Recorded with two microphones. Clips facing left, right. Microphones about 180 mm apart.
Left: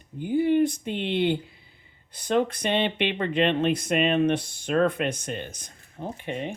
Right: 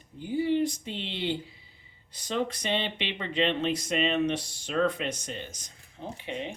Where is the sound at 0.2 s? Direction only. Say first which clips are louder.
Left 5 dB; 55° left (ahead or behind).